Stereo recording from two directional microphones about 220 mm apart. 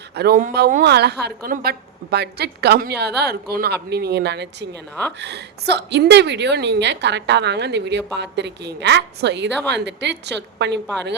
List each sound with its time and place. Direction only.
0.2 s a woman's voice: 40° right (ahead or behind)